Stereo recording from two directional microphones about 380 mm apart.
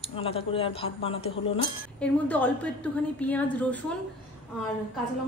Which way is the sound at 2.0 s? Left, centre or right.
Centre.